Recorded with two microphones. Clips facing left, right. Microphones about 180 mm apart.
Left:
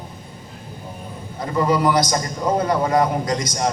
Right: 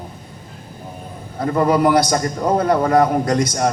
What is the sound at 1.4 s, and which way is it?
A man's voice, 55° right (ahead or behind).